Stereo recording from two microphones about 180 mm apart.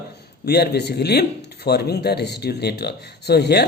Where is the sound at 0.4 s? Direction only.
65° left (ahead or behind).